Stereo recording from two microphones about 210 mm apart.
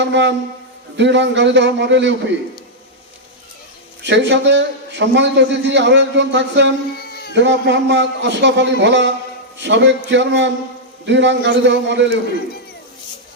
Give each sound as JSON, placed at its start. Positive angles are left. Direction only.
{"t": 0.0, "sound": "a man's voice", "side_deg": -55}
{"t": 4.0, "sound": "a man's voice", "side_deg": -55}